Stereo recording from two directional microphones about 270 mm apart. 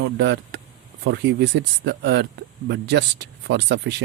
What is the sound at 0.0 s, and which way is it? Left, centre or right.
Speech, right.